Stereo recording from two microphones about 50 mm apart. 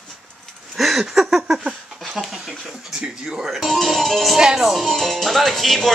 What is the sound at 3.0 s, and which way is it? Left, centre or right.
Speech, centre.